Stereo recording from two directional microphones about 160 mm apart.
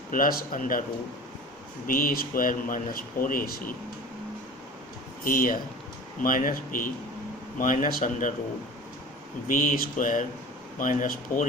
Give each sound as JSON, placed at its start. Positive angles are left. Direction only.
{"t": 0.1, "sound": "speech", "side_deg": 65}
{"t": 1.9, "sound": "speech", "side_deg": 65}
{"t": 5.2, "sound": "speech", "side_deg": 60}
{"t": 9.5, "sound": "speech", "side_deg": 60}